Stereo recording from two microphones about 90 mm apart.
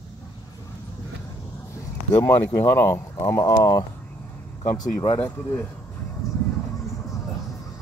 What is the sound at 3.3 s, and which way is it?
Speech, 45° left (ahead or behind).